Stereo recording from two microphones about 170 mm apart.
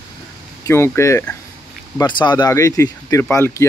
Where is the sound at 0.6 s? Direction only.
15° left (ahead or behind).